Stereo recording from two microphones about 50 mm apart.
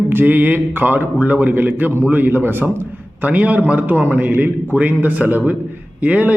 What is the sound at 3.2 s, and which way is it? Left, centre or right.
Speech, right.